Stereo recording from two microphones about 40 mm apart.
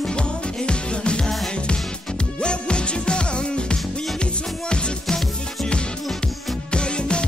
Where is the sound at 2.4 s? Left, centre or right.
Left.